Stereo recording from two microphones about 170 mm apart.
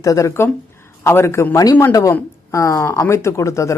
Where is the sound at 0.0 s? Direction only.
20° left (ahead or behind).